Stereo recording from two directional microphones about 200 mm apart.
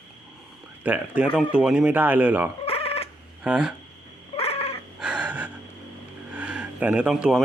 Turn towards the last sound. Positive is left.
turn(degrees=-5)  # may be behind; listen again after turning